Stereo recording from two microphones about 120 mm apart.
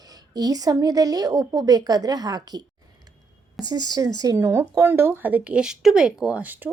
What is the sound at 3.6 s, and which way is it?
Speech, 35° right (ahead or behind).